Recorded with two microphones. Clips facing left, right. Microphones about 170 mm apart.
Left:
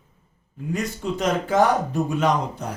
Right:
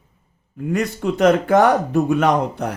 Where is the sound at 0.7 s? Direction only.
65° right (ahead or behind).